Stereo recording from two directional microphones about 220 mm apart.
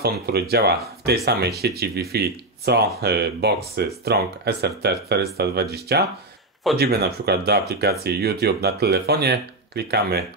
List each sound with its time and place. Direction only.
0.0 s speech: 45° right (ahead or behind)